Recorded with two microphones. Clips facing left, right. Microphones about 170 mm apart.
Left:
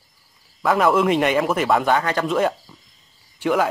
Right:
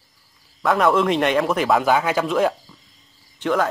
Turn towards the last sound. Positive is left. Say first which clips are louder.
# left 1 dB
turn(degrees=10)  # may be behind; listen again after turning